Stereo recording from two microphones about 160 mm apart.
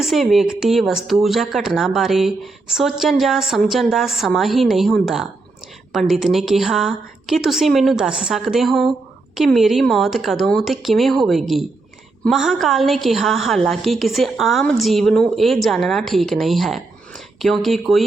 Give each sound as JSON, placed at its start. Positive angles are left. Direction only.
{"t": 0.0, "sound": "speech", "side_deg": 0}